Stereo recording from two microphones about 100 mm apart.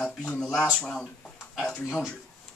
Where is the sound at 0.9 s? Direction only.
5° left (ahead or behind).